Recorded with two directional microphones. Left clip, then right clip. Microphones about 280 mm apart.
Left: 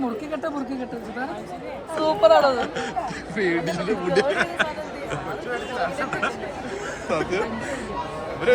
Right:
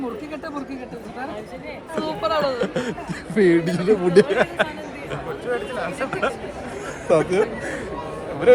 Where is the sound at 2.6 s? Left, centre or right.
Centre.